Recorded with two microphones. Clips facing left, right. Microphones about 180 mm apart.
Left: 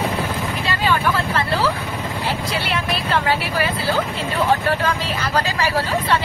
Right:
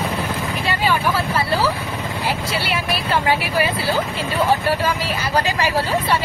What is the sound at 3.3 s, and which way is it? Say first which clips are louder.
Speech: right 2 dB; 15° right (ahead or behind).